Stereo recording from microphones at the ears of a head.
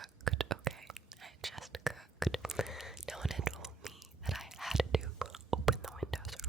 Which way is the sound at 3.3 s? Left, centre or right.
Right.